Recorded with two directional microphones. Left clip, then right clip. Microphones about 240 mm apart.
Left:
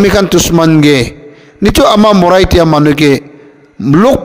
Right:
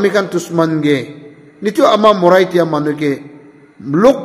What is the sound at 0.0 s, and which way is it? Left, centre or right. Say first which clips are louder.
A man's voice: left 6 dB; left.